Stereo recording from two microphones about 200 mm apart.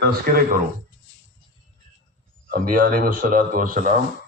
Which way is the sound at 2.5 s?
45° right (ahead or behind).